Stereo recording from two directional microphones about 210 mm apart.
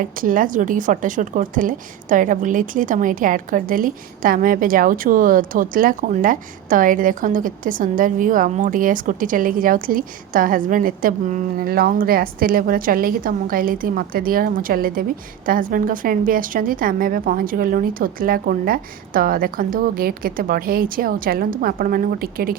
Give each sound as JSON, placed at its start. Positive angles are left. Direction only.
{"t": 0.0, "sound": "a woman's voice", "side_deg": -40}